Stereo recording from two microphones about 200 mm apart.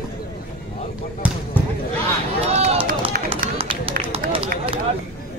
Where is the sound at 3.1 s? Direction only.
45° right (ahead or behind).